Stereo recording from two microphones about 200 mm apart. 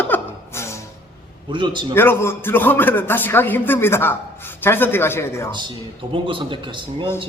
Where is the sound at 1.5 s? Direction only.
25° right (ahead or behind).